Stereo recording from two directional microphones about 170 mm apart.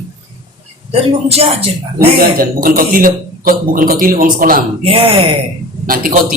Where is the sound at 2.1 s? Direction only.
60° right (ahead or behind).